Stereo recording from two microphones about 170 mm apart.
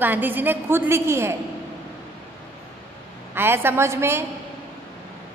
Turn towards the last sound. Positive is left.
turn(degrees=-15)  # may be behind; listen again after turning